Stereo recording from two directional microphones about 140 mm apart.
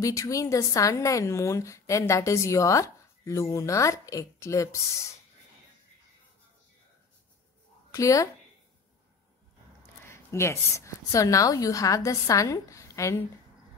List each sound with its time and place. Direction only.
0.0 s a woman's voice: 25° left (ahead or behind)
7.9 s speech: 25° left (ahead or behind)
10.0 s a woman's voice: 20° left (ahead or behind)